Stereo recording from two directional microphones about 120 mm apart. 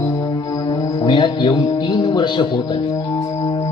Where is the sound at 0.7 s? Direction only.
40° left (ahead or behind).